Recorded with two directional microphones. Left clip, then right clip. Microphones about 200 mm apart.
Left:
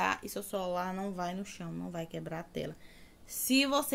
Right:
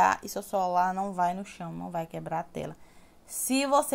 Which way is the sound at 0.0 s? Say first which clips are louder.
Right 8 dB; 20° right (ahead or behind).